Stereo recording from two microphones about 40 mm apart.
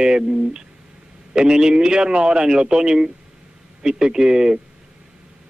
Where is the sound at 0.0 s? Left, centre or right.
Centre.